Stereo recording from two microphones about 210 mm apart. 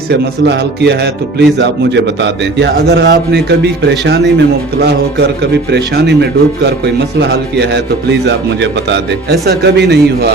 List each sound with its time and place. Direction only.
0.1 s speech: 55° right (ahead or behind)
7.2 s speech: 55° right (ahead or behind)